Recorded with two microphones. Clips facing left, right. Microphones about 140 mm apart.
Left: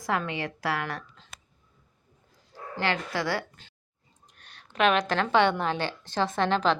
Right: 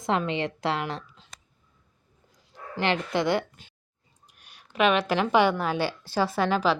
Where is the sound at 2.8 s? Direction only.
20° right (ahead or behind).